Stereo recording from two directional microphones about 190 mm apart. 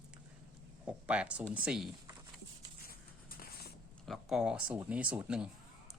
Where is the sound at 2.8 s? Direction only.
50° left (ahead or behind).